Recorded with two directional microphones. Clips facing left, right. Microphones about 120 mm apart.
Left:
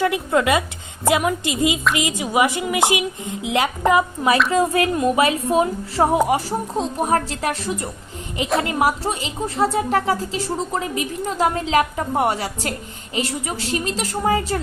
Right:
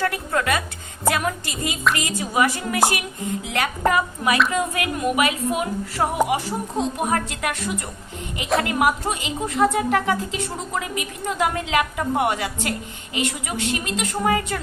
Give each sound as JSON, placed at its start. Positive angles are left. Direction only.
{"t": 0.0, "sound": "speech", "side_deg": 20}